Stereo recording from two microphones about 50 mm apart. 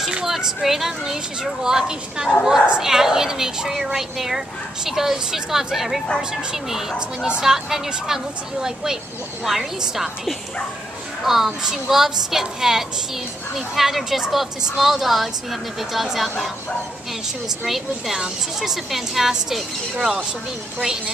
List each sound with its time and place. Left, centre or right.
0.0 s a woman's voice: centre
17.6 s a woman's voice: centre